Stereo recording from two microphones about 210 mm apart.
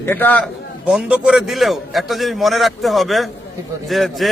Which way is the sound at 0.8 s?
5° right (ahead or behind).